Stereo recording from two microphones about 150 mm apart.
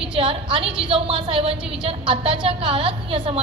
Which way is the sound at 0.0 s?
35° right (ahead or behind).